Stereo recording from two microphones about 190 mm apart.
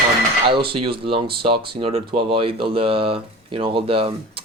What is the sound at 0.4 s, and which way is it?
Speech, 25° right (ahead or behind).